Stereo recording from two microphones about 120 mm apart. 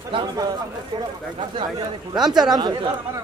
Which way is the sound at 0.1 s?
45° right (ahead or behind).